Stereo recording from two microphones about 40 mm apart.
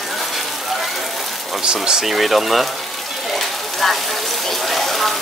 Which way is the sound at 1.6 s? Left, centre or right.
Right.